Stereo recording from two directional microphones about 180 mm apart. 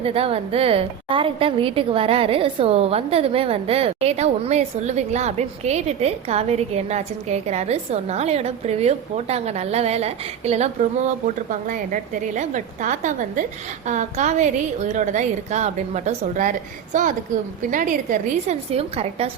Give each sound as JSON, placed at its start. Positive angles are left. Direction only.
{"t": 0.0, "sound": "a woman's voice", "side_deg": -30}
{"t": 18.7, "sound": "a woman's voice", "side_deg": -35}